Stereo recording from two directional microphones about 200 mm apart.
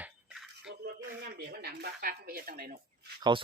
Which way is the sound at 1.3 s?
50° right (ahead or behind).